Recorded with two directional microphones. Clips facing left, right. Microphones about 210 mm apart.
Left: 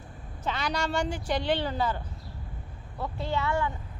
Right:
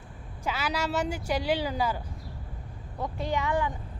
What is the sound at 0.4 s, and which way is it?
Speech, 5° right (ahead or behind).